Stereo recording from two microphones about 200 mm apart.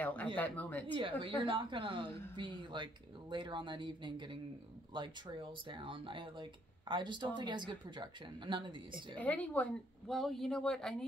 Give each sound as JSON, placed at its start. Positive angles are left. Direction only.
{"t": 0.0, "sound": "a sound", "side_deg": 10}
{"t": 0.4, "sound": "a woman's voice", "side_deg": 10}
{"t": 1.2, "sound": "speech", "side_deg": -25}
{"t": 9.2, "sound": "a woman's voice", "side_deg": 5}